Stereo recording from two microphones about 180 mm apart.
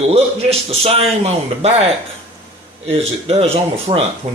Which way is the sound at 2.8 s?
35° right (ahead or behind).